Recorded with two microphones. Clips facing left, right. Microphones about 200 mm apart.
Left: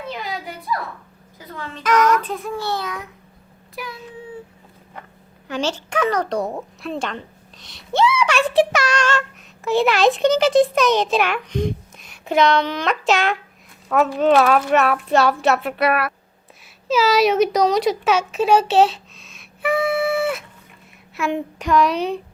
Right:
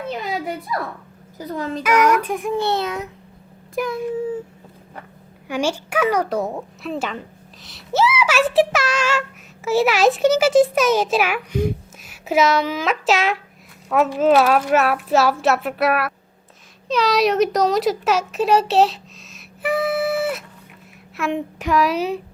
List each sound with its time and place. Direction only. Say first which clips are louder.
1.4 s a child's voice: right 8 dB; 40° right (ahead or behind)
1.8 s a woman's voice: even; 10° right (ahead or behind)
3.8 s speech: right 11 dB; 45° right (ahead or behind)
5.5 s a woman's voice: right 2 dB; 10° right (ahead or behind)